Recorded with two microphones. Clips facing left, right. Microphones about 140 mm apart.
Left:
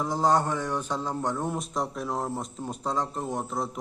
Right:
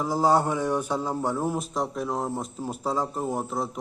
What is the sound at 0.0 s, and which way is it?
A man's voice, 5° right (ahead or behind).